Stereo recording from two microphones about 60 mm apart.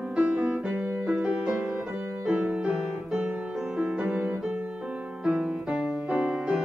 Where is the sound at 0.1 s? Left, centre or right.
Right.